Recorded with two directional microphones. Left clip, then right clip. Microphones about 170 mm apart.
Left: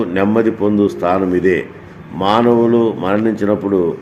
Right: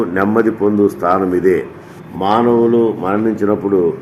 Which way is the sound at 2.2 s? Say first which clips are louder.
Even; 45° left (ahead or behind).